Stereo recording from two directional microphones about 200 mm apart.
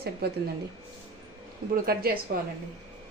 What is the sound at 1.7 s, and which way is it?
Speech, 45° right (ahead or behind).